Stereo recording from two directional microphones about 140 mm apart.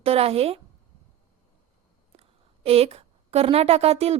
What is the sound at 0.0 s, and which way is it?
Speech, 45° right (ahead or behind).